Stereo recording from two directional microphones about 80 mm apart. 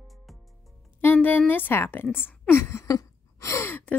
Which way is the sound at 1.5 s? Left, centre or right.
Left.